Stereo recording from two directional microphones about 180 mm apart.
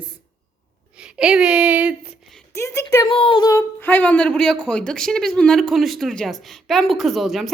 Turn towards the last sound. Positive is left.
turn(degrees=0)  # may be behind; listen again after turning